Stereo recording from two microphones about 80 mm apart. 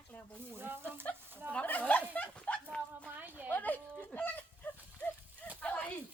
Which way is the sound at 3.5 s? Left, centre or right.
Left.